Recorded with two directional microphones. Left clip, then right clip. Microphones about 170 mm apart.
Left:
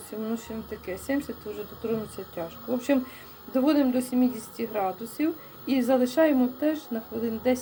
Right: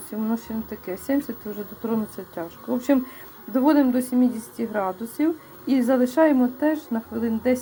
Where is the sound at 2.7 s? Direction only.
35° right (ahead or behind).